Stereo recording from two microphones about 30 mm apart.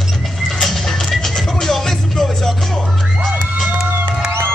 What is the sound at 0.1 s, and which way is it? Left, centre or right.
Music, centre.